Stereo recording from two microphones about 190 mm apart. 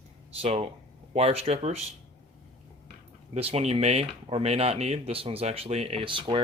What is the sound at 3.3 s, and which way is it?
Speech, 35° right (ahead or behind).